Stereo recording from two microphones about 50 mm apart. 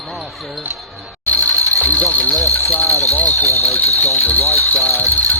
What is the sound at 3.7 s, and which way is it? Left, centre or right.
Speech, left.